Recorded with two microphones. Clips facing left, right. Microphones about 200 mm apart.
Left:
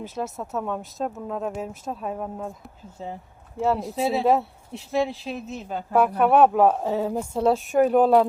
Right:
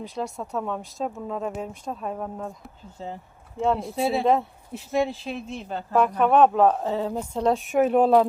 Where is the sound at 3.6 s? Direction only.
5° left (ahead or behind).